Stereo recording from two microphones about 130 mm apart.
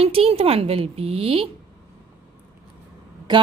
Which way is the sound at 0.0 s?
50° right (ahead or behind).